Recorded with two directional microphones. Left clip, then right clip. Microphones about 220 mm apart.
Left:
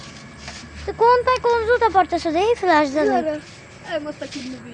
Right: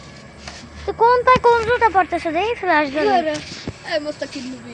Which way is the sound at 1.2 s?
15° right (ahead or behind).